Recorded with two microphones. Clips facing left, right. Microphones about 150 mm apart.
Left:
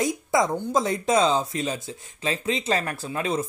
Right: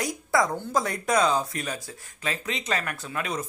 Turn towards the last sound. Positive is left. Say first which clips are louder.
# left 5 dB
turn(degrees=30)  # may be behind; listen again after turning